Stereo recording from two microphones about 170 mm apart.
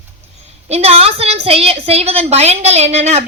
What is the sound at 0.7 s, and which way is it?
A woman's voice, 35° right (ahead or behind).